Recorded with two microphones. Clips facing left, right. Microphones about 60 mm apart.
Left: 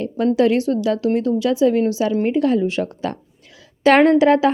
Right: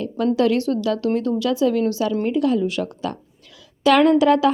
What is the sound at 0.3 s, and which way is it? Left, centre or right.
Speech, left.